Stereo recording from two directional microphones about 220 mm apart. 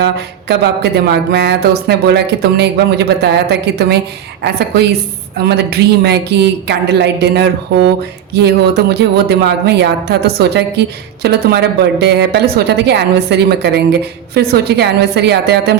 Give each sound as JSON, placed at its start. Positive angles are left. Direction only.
{"t": 0.0, "sound": "speech", "side_deg": -50}